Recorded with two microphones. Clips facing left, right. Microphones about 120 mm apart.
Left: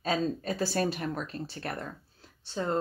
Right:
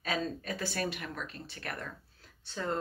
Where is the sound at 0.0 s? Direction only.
30° left (ahead or behind).